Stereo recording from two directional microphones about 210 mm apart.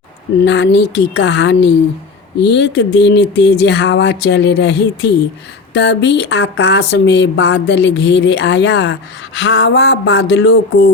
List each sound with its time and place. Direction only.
0.4 s speech: 55° left (ahead or behind)